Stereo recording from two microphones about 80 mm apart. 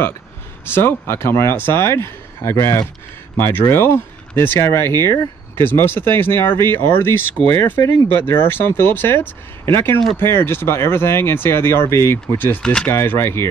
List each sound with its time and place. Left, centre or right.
0.7 s speech: left